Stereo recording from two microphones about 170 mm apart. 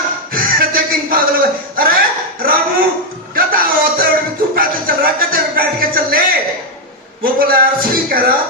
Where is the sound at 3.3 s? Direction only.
55° right (ahead or behind).